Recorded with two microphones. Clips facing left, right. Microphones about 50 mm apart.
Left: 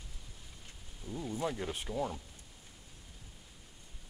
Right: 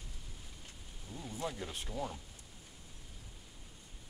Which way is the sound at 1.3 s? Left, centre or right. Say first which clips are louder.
Left 4 dB; centre.